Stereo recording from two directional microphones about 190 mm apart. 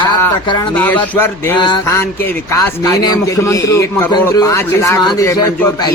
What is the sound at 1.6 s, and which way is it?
A man's voice, 25° left (ahead or behind).